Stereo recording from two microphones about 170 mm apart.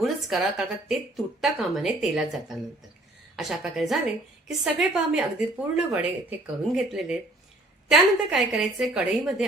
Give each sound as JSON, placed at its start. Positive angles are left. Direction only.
{"t": 0.0, "sound": "a woman's voice", "side_deg": 0}
{"t": 3.3, "sound": "a woman's voice", "side_deg": 0}